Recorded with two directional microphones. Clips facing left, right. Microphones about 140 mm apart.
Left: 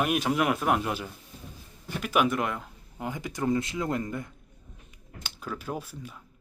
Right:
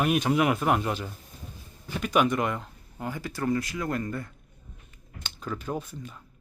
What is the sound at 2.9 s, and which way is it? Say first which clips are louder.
Speech: even; 15° left (ahead or behind).